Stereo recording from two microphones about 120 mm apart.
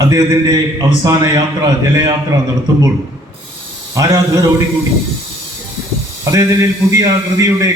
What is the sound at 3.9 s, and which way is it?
Speech, 30° right (ahead or behind).